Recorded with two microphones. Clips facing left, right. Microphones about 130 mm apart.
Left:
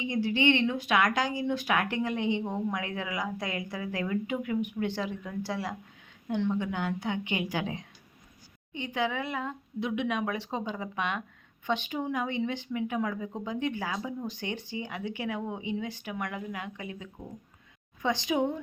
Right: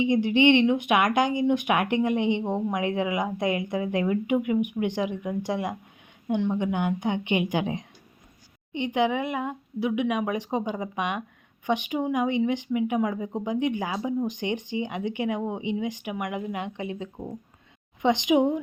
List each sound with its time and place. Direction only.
0.0 s speech: 20° right (ahead or behind)